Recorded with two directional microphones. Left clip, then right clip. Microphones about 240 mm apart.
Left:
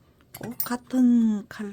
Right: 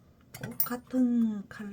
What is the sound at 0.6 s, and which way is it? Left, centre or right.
Speech, left.